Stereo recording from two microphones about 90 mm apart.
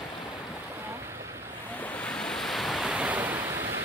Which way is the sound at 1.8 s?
15° left (ahead or behind).